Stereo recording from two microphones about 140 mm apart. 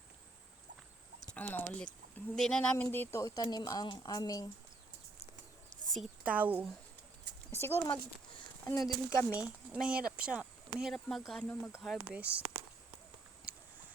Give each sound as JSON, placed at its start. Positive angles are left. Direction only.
{"t": 1.3, "sound": "a woman's voice", "side_deg": 10}
{"t": 5.7, "sound": "a sound", "side_deg": 0}
{"t": 6.2, "sound": "speech", "side_deg": -10}
{"t": 7.5, "sound": "speech", "side_deg": 15}
{"t": 8.8, "sound": "speech", "side_deg": -5}
{"t": 11.4, "sound": "speech", "side_deg": 15}
{"t": 11.8, "sound": "speech", "side_deg": -5}